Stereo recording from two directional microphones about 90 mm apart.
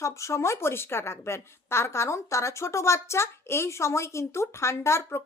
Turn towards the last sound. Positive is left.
turn(degrees=30)  # may be behind; listen again after turning